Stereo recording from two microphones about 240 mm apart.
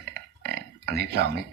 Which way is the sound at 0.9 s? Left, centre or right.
Right.